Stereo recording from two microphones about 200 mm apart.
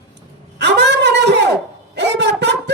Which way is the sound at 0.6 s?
60° right (ahead or behind).